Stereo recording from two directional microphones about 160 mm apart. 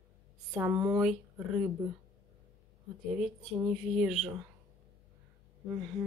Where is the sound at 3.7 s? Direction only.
5° right (ahead or behind).